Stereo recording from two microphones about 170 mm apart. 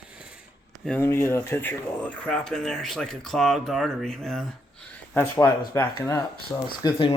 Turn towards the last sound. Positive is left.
turn(degrees=30)  # may be behind; listen again after turning